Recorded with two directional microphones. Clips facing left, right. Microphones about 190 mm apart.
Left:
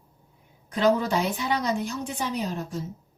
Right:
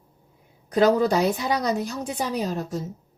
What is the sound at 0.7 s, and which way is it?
A woman's voice, 40° right (ahead or behind).